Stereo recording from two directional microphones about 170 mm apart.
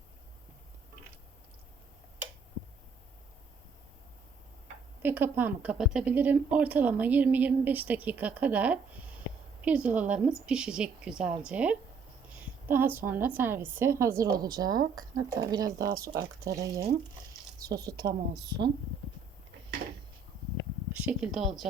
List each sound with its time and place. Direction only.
5.0 s a woman's voice: 10° right (ahead or behind)
21.0 s speech: 5° right (ahead or behind)